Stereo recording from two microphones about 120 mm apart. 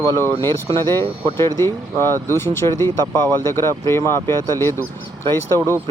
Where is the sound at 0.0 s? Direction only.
20° left (ahead or behind).